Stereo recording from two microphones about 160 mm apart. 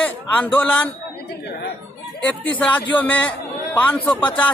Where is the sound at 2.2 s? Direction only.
10° left (ahead or behind).